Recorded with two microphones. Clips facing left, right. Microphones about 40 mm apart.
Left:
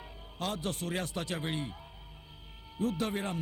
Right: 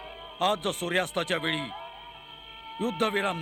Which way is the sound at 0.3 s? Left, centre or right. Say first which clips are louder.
Right 8 dB; right.